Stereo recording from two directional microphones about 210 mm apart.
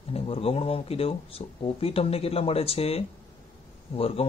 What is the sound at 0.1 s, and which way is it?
A man's voice, 25° left (ahead or behind).